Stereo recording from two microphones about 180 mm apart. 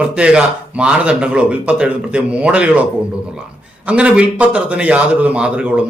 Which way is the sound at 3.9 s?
5° right (ahead or behind).